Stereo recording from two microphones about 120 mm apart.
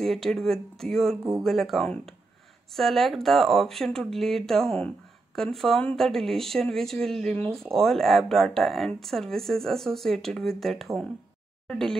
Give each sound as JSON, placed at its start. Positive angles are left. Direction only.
{"t": 0.0, "sound": "speech", "side_deg": 5}